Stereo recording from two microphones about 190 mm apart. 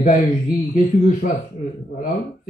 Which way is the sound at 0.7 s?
45° left (ahead or behind).